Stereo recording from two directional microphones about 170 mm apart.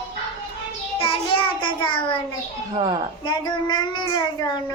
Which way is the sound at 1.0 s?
30° left (ahead or behind).